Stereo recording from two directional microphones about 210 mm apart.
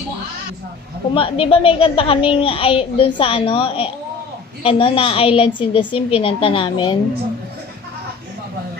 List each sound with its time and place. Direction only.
1.1 s a child's voice: 25° left (ahead or behind)